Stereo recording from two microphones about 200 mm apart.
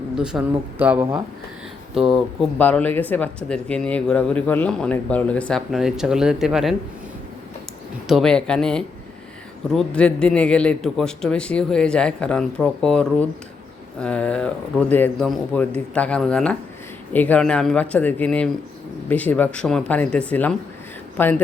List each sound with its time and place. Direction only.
0.2 s speech: 5° right (ahead or behind)
8.0 s speech: centre (ahead or behind)